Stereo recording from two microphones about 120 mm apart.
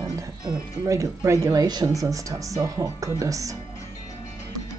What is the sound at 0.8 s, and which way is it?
Speech, 25° right (ahead or behind).